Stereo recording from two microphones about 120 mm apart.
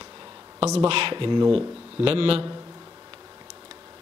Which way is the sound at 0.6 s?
50° right (ahead or behind).